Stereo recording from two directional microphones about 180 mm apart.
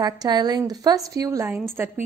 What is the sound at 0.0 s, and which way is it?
A woman's voice, 20° right (ahead or behind).